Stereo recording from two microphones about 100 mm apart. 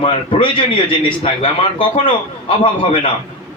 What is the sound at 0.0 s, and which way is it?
A man's voice, 60° left (ahead or behind).